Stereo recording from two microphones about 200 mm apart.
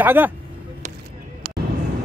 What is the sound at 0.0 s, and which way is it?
Speech, 10° right (ahead or behind).